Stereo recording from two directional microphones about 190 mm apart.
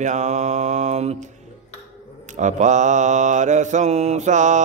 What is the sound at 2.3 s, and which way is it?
Mantra, 40° right (ahead or behind).